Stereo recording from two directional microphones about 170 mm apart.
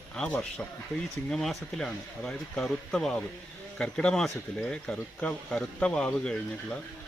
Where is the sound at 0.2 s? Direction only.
5° left (ahead or behind).